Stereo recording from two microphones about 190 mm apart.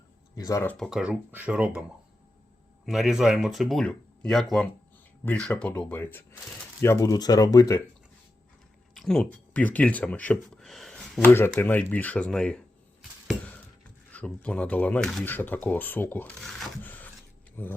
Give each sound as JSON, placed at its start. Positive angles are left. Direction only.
{"t": 0.3, "sound": "speech", "side_deg": 20}
{"t": 0.9, "sound": "speech", "side_deg": -5}
{"t": 2.8, "sound": "speech", "side_deg": 0}
{"t": 9.0, "sound": "speech", "side_deg": 0}
{"t": 11.3, "sound": "speech", "side_deg": 10}